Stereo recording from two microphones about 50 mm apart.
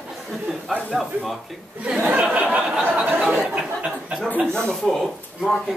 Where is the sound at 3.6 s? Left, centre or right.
Centre.